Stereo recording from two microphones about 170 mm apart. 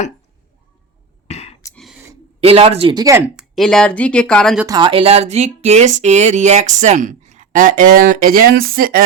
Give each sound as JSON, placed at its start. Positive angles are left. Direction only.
{"t": 1.3, "sound": "a sound", "side_deg": 40}
{"t": 1.7, "sound": "a sound", "side_deg": 0}
{"t": 2.4, "sound": "speech", "side_deg": -35}
{"t": 2.9, "sound": "speech", "side_deg": -20}
{"t": 3.3, "sound": "speech", "side_deg": 0}
{"t": 4.6, "sound": "speech", "side_deg": -25}